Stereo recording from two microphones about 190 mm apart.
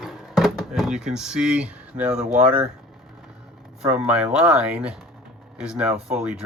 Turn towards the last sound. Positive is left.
turn(degrees=-5)  # may be behind; listen again after turning